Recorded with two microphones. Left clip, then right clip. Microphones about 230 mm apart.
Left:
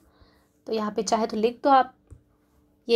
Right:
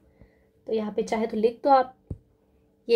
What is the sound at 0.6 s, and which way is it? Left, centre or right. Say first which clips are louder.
Speech: even; left.